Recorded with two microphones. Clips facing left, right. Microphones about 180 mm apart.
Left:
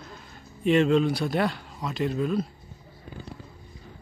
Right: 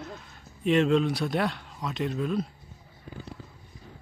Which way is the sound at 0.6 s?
Centre (ahead or behind).